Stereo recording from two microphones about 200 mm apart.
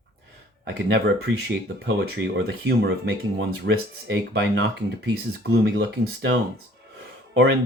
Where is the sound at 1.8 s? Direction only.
60° right (ahead or behind).